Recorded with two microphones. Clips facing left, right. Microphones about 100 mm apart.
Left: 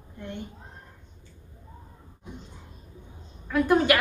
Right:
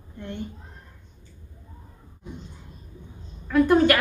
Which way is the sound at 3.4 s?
5° left (ahead or behind).